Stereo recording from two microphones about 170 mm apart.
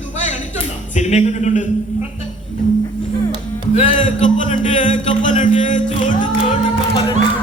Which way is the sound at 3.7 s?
45° left (ahead or behind).